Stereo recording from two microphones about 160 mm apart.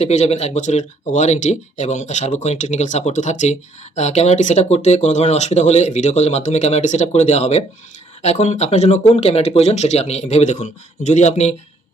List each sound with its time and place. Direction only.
0.0 s speech: 45° left (ahead or behind)